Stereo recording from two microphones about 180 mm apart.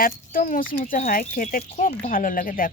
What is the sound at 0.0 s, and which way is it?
Speech, 50° left (ahead or behind).